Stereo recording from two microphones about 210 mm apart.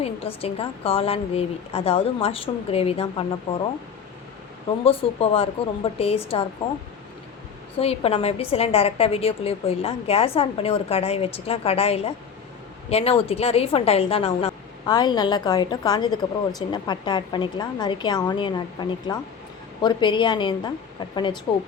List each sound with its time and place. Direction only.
0.0 s a woman's voice: 30° left (ahead or behind)
4.8 s a woman's voice: 25° left (ahead or behind)
7.8 s a woman's voice: 30° left (ahead or behind)